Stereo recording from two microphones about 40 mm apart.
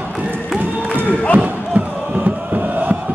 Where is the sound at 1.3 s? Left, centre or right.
Right.